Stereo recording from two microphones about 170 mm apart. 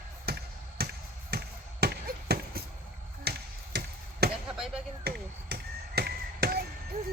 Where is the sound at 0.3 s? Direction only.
70° right (ahead or behind).